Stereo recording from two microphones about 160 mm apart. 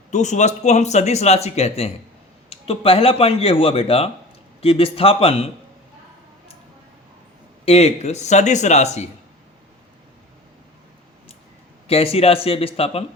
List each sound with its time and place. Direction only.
0.1 s speech: 50° left (ahead or behind)
7.6 s speech: 40° left (ahead or behind)
11.9 s speech: 35° left (ahead or behind)